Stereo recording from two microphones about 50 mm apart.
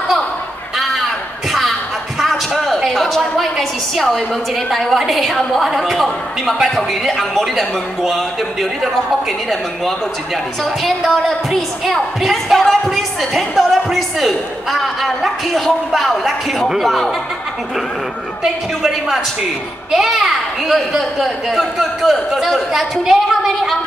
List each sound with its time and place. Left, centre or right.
2.1 s a sound: centre
2.8 s a woman's voice: centre
10.6 s a woman's voice: centre
18.4 s a man's voice: centre